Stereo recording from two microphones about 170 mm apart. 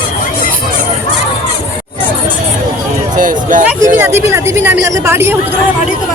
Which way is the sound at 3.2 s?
50° right (ahead or behind).